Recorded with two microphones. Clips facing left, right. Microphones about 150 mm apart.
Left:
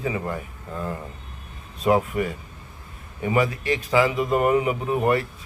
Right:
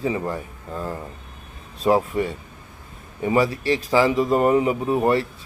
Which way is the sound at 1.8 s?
30° right (ahead or behind).